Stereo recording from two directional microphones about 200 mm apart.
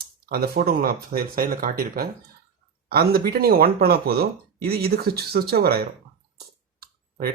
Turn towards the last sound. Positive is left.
turn(degrees=-45)  # may be behind; listen again after turning